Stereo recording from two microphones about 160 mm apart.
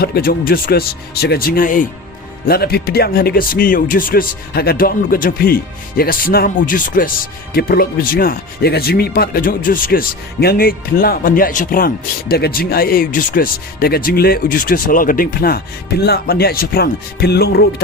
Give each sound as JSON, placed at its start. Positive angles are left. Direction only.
{"t": 0.0, "sound": "speech", "side_deg": 70}
{"t": 2.5, "sound": "speech", "side_deg": 75}
{"t": 7.5, "sound": "speech", "side_deg": 70}
{"t": 12.3, "sound": "speech", "side_deg": 75}